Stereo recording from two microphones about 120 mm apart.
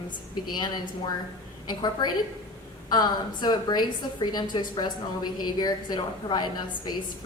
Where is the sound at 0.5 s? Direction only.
35° left (ahead or behind).